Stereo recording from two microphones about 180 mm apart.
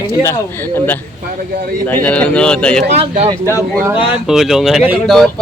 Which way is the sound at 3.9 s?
30° left (ahead or behind).